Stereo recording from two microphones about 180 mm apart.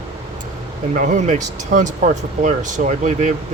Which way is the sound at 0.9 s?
45° right (ahead or behind).